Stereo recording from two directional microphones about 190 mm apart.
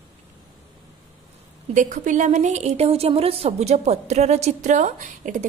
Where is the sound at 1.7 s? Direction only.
40° right (ahead or behind).